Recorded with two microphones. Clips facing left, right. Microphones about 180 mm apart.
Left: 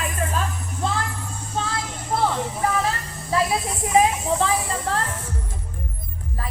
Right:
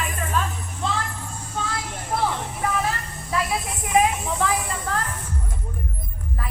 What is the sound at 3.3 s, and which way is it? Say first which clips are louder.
Music: left 4 dB; 30° left (ahead or behind).